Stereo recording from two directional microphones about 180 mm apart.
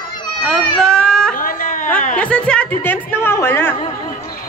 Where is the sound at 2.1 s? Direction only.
5° left (ahead or behind).